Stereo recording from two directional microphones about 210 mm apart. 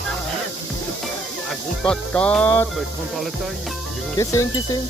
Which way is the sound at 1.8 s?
5° left (ahead or behind).